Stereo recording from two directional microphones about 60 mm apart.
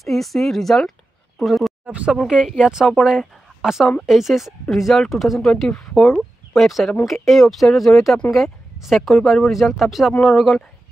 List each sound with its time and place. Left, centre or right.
0.0 s speech: centre
1.9 s speech: right
2.2 s speech: centre